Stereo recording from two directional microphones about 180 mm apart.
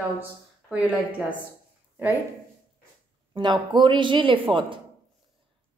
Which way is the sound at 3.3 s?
25° right (ahead or behind).